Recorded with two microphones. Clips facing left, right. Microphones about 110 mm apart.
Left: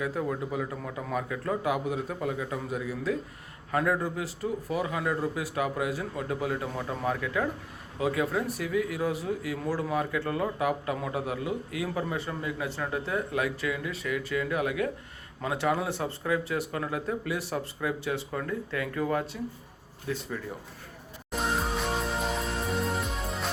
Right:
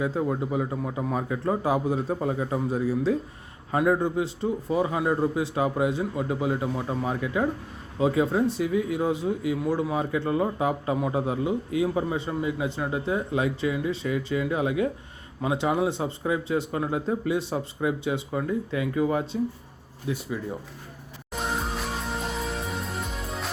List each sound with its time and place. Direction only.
0.0 s a man's voice: 25° right (ahead or behind)
21.4 s music: centre (ahead or behind)